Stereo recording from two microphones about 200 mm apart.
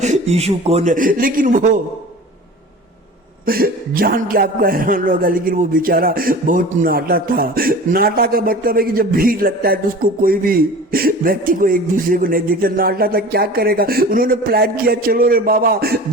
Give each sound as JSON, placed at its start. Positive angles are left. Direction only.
{"t": 0.0, "sound": "a man's voice", "side_deg": -35}
{"t": 3.4, "sound": "a man's voice", "side_deg": -45}